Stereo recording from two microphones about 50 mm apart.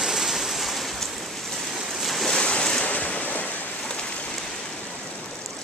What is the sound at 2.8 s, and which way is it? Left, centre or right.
Waves, left.